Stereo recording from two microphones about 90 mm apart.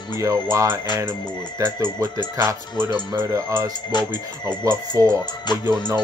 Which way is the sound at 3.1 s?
25° right (ahead or behind).